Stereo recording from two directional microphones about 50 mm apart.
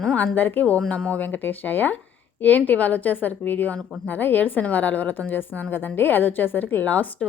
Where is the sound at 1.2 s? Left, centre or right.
Left.